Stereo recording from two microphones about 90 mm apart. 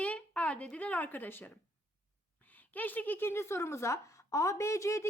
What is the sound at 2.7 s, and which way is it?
Speech, 20° left (ahead or behind).